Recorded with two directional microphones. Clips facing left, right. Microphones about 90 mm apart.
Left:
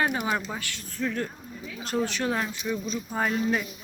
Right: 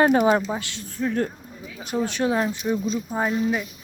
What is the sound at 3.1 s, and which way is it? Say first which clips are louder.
Speech: right 1 dB; 10° right (ahead or behind).